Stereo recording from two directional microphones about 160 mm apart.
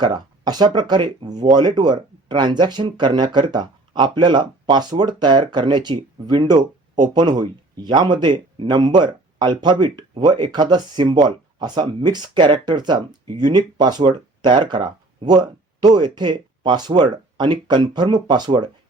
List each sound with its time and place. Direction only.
0.0 s speech: 25° right (ahead or behind)